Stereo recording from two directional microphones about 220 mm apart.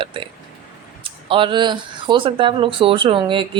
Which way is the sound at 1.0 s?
25° right (ahead or behind).